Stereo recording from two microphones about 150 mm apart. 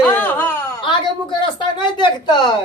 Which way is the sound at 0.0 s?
15° left (ahead or behind).